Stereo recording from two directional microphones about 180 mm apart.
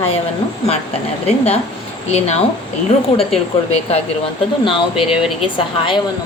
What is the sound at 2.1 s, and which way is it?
A woman's voice, 35° left (ahead or behind).